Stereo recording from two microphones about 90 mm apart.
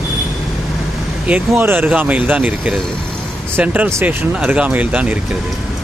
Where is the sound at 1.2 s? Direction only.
20° right (ahead or behind).